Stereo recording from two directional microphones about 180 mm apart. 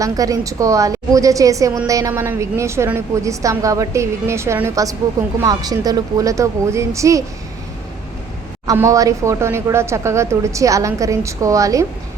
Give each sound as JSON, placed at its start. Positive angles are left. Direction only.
{"t": 0.0, "sound": "a woman's voice", "side_deg": -20}
{"t": 8.6, "sound": "speech", "side_deg": -15}